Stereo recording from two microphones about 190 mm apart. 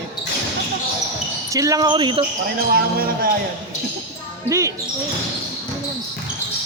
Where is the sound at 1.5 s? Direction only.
15° right (ahead or behind).